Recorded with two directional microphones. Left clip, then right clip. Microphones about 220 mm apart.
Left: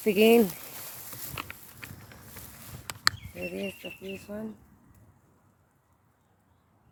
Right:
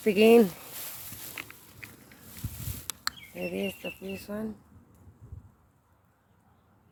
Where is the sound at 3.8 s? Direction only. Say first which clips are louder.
Right 2 dB; 30° right (ahead or behind).